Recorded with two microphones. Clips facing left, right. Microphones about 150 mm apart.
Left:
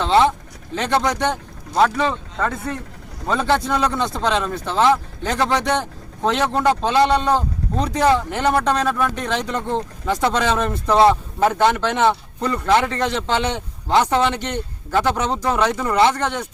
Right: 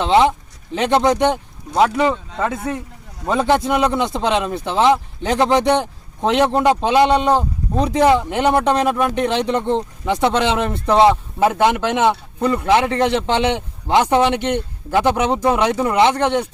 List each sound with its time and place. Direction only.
0.0 s a man's voice: 20° right (ahead or behind)
11.1 s a man's voice: 5° right (ahead or behind)